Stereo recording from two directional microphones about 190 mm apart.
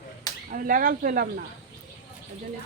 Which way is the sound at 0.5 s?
45° right (ahead or behind).